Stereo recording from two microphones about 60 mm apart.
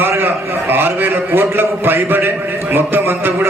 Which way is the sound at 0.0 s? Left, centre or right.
Right.